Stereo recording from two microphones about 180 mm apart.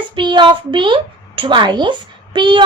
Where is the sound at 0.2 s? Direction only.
25° right (ahead or behind).